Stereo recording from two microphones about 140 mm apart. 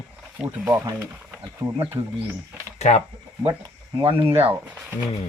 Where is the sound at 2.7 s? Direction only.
55° left (ahead or behind).